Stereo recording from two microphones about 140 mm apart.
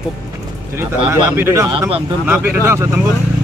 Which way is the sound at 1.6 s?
35° right (ahead or behind).